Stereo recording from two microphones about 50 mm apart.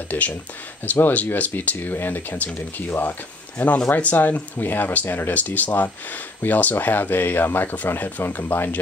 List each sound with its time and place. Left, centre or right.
0.1 s speech: left